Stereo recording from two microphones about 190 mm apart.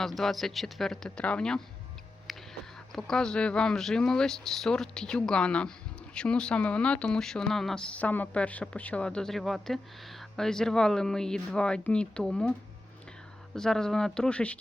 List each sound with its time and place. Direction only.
0.0 s speech: centre (ahead or behind)
2.9 s speech: 5° left (ahead or behind)